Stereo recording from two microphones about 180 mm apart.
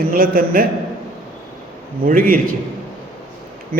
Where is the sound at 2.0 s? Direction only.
55° right (ahead or behind).